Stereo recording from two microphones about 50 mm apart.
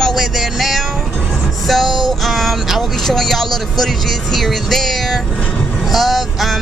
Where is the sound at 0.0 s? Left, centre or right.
Centre.